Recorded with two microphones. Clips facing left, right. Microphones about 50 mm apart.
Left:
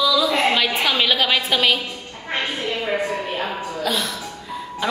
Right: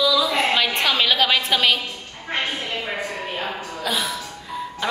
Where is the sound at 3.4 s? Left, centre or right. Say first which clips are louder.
Left 3 dB; centre.